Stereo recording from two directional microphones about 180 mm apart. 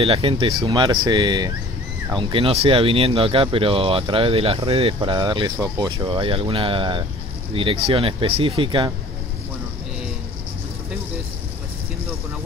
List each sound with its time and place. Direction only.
0.0 s speech: 30° right (ahead or behind)